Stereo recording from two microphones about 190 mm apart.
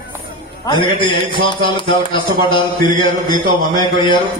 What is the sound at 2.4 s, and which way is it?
A man's voice, 25° left (ahead or behind).